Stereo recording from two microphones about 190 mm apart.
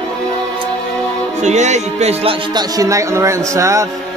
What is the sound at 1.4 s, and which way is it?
Speech, 35° right (ahead or behind).